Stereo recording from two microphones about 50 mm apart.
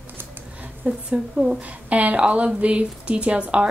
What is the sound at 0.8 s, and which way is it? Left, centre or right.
Speech, right.